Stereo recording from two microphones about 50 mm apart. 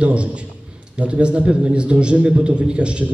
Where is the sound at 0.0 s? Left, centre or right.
Right.